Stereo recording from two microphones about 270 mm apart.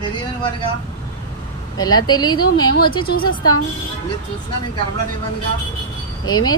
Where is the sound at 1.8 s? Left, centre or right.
Centre.